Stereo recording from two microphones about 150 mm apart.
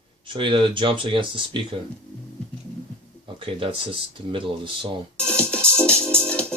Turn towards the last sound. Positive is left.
turn(degrees=5)  # may be behind; listen again after turning